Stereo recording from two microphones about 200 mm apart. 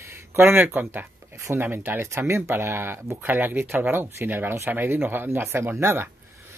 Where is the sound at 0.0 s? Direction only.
15° right (ahead or behind).